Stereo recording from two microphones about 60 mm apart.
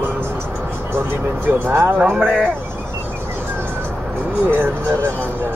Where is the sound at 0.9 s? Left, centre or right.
Right.